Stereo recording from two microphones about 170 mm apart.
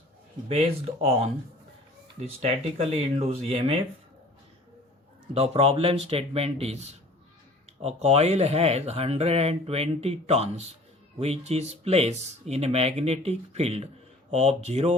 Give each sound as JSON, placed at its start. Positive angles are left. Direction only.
{"t": 0.4, "sound": "speech", "side_deg": -35}
{"t": 2.4, "sound": "speech", "side_deg": -35}
{"t": 5.3, "sound": "speech", "side_deg": -35}